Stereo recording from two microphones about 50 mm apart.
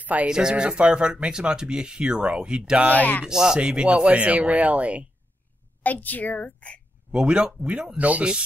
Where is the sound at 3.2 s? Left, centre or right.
Centre; by 5.0 s right.